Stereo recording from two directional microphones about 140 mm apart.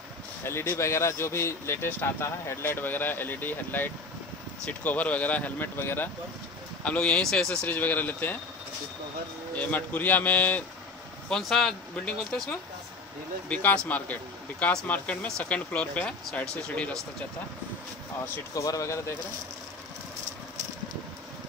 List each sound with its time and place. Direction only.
0.4 s speech: 20° left (ahead or behind)
9.6 s speech: 10° left (ahead or behind)
18.5 s speech: 25° left (ahead or behind)